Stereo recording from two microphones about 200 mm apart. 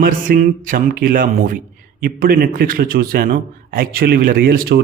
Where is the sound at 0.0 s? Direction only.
45° right (ahead or behind).